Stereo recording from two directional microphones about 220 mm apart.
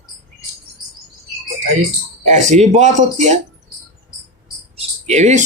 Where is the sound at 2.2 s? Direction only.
35° right (ahead or behind).